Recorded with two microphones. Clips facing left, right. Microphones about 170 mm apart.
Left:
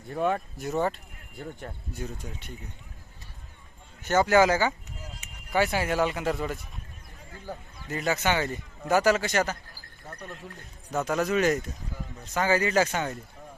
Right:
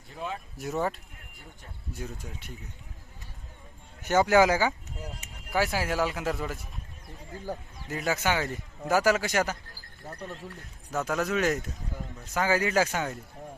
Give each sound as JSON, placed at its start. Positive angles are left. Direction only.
{"t": 0.1, "sound": "speech", "side_deg": 60}
{"t": 0.6, "sound": "speech", "side_deg": 0}
{"t": 1.6, "sound": "speech", "side_deg": 65}
{"t": 2.0, "sound": "speech", "side_deg": -5}
{"t": 4.0, "sound": "speech", "side_deg": -15}
{"t": 7.9, "sound": "speech", "side_deg": -5}
{"t": 10.1, "sound": "speech", "side_deg": -20}
{"t": 10.9, "sound": "speech", "side_deg": 0}